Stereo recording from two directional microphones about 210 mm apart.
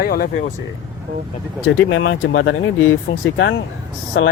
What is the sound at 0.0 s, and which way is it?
Speech, 45° left (ahead or behind).